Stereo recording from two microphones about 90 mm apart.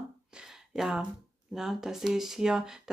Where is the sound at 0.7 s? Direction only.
5° right (ahead or behind).